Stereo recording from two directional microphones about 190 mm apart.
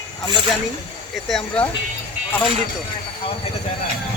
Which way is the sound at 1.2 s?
5° left (ahead or behind).